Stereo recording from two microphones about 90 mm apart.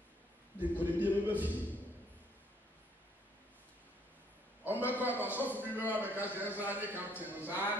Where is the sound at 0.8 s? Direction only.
20° right (ahead or behind).